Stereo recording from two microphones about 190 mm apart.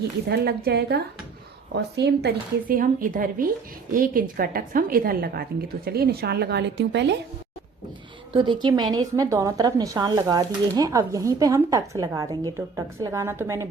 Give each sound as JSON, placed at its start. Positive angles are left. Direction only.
{"t": 0.3, "sound": "a woman's voice", "side_deg": -55}
{"t": 8.3, "sound": "a woman's voice", "side_deg": -25}